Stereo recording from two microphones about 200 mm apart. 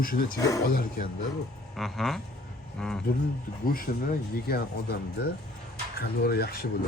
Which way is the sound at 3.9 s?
55° left (ahead or behind).